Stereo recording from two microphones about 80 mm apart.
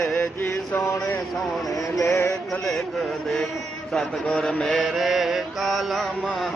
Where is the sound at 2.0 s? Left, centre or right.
Left.